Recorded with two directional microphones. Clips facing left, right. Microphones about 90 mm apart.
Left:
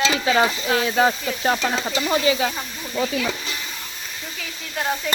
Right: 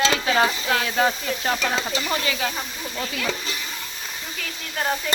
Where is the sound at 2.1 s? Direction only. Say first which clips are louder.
Left 8 dB; 25° left (ahead or behind).